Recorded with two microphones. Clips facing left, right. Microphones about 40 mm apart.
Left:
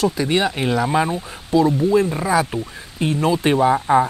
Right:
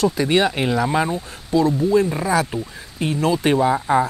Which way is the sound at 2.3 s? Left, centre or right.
Centre.